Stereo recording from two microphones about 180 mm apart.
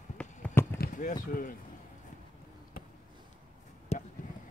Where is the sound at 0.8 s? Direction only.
45° left (ahead or behind).